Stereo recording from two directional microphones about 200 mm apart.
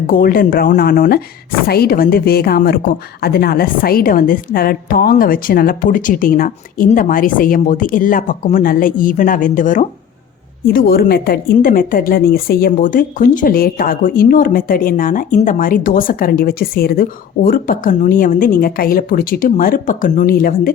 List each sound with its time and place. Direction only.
0.1 s speech: 45° left (ahead or behind)